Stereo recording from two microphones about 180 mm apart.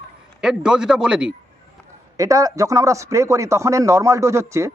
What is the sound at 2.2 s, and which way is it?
Speech, 20° right (ahead or behind).